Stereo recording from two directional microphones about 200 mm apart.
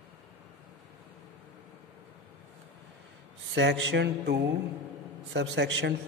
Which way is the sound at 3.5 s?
65° right (ahead or behind).